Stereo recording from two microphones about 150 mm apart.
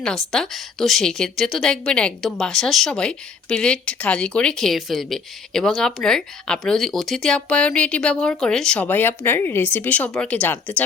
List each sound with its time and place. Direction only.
0.0 s a woman's voice: 5° left (ahead or behind)